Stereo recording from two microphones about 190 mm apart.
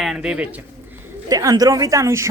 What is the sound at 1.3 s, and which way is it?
A woman's voice, 20° right (ahead or behind).